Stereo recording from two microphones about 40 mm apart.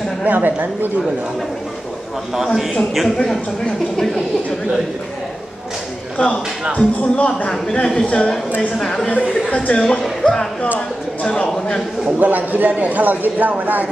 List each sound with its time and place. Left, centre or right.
0.3 s a man's voice: right
2.3 s a man's voice: centre
3.3 s a woman's voice: centre
6.8 s a woman's voice: left
8.7 s a woman's voice: centre
9.5 s speech: left
10.2 s a woman's voice: centre
12.2 s a man's voice: right